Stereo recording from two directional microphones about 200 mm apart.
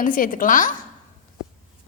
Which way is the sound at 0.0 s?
40° left (ahead or behind).